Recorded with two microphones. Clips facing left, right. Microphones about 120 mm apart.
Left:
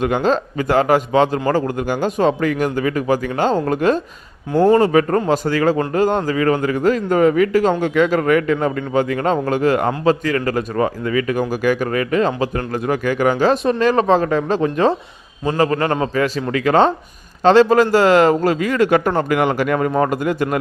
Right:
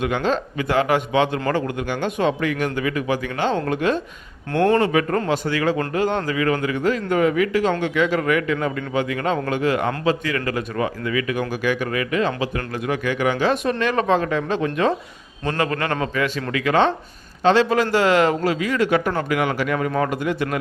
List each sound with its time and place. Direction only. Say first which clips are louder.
0.0 s a man's voice: left 4 dB; 40° left (ahead or behind)